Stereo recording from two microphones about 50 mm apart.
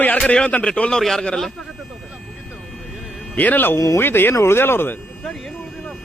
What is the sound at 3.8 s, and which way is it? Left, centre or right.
Speech, left.